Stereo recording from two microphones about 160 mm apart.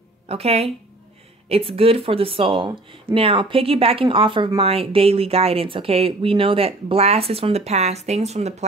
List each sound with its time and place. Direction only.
0.3 s speech: 40° right (ahead or behind)